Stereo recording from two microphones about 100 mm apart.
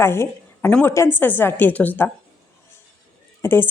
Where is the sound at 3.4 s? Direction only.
25° left (ahead or behind).